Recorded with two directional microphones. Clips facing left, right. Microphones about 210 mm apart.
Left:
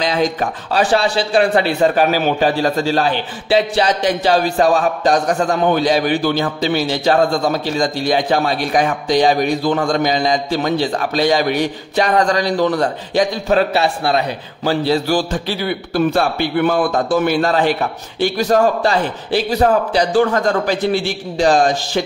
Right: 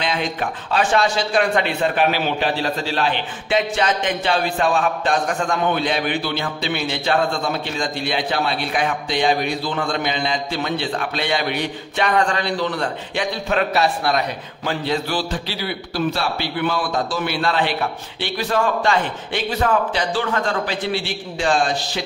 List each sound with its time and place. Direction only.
0.0 s speech: 40° left (ahead or behind)